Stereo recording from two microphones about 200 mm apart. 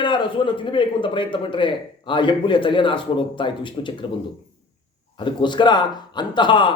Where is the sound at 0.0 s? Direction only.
25° left (ahead or behind).